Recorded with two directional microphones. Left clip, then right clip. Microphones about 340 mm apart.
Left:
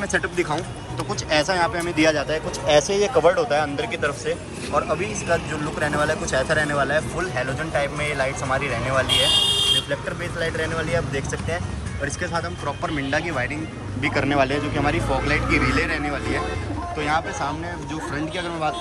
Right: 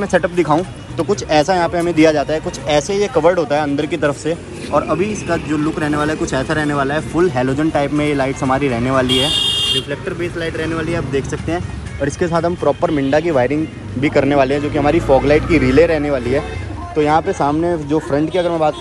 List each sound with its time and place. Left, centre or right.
0.0 s speech: centre
9.0 s speech: left
10.2 s speech: centre